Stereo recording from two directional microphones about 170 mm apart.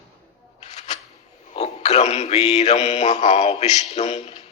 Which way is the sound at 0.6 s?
40° left (ahead or behind).